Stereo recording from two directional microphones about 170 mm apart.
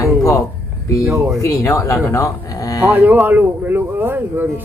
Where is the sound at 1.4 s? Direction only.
20° left (ahead or behind).